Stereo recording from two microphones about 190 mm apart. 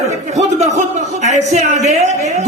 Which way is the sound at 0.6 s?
35° right (ahead or behind).